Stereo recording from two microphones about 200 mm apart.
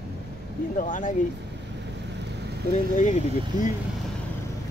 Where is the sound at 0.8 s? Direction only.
40° left (ahead or behind).